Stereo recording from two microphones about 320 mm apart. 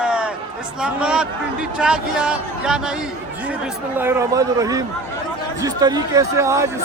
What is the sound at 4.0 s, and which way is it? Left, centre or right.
Speech, centre.